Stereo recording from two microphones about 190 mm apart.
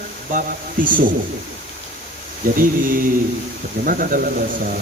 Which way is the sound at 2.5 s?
45° right (ahead or behind).